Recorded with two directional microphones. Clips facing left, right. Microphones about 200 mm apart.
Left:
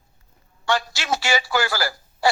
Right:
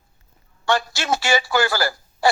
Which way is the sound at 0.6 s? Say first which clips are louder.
Right 2 dB; 55° right (ahead or behind).